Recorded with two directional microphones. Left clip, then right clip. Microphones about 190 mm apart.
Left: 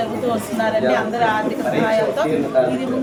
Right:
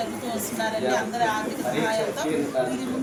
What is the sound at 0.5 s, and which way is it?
A woman's voice, 5° left (ahead or behind).